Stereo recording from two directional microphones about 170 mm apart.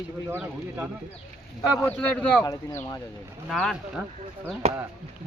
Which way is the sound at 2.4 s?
20° left (ahead or behind).